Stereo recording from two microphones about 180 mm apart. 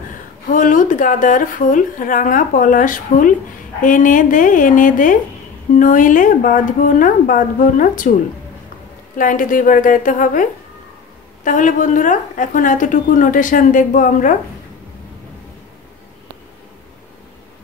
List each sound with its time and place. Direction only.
0.5 s a woman's voice: 45° left (ahead or behind)
9.2 s a woman's voice: 50° left (ahead or behind)